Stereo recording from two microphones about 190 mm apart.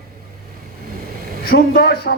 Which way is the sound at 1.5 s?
55° left (ahead or behind).